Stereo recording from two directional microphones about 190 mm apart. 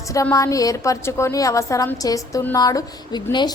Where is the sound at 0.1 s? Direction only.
15° left (ahead or behind).